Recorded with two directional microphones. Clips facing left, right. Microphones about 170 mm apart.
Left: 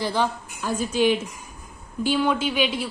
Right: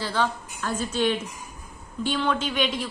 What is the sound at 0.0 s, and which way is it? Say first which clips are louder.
A woman's voice: left 2 dB; 15° left (ahead or behind).